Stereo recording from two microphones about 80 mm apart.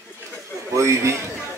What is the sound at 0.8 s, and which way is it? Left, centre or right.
Speech, right.